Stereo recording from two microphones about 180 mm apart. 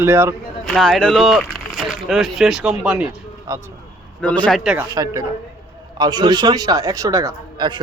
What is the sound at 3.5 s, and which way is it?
Speech, 15° right (ahead or behind).